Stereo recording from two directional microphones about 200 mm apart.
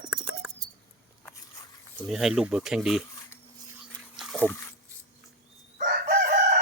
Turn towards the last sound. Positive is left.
turn(degrees=-40)  # may be behind; listen again after turning